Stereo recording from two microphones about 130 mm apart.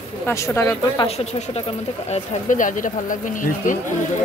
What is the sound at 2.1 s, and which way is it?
Speech, 85° left.